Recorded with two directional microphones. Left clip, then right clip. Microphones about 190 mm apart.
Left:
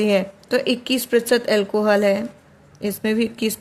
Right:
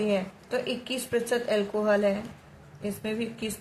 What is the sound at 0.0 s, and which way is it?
Speech, 55° left (ahead or behind).